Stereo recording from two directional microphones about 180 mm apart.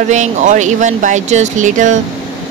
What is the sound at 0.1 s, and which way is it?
Speech, 45° right (ahead or behind).